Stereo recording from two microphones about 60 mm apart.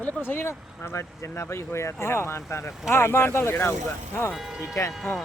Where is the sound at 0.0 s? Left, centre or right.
Left.